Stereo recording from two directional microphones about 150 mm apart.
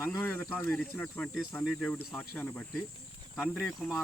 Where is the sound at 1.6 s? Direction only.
Centre (ahead or behind).